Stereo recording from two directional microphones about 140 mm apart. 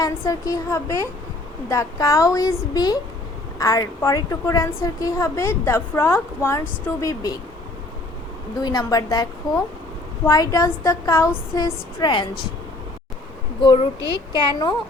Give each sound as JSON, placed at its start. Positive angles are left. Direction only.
{"t": 0.0, "sound": "a woman's voice", "side_deg": 25}
{"t": 8.5, "sound": "a woman's voice", "side_deg": 30}
{"t": 10.2, "sound": "a woman's voice", "side_deg": 25}
{"t": 14.1, "sound": "speech", "side_deg": 35}